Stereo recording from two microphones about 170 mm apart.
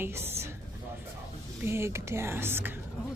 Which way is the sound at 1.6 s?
15° right (ahead or behind).